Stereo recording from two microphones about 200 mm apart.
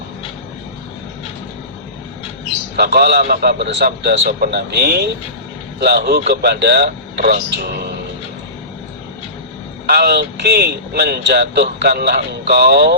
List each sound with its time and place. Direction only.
2.7 s speech: 55° right (ahead or behind)
9.8 s speech: 50° right (ahead or behind)